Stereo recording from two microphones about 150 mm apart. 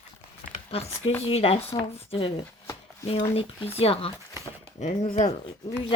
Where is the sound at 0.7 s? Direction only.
40° left (ahead or behind).